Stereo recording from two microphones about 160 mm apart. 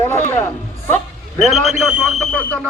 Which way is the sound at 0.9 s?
5° left (ahead or behind).